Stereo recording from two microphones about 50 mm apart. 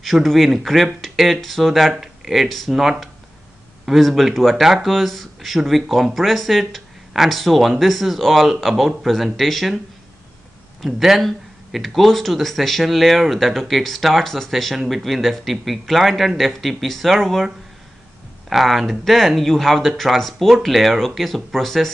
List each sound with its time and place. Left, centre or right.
0.0 s speech: centre
4.6 s speech: centre
4.8 s speech: centre
10.9 s speech: centre
18.5 s speech: centre